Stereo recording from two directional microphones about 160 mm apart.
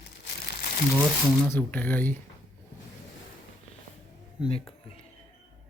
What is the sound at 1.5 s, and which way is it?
Speech, 10° left (ahead or behind).